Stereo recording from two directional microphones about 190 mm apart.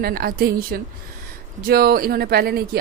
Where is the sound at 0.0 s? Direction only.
50° right (ahead or behind).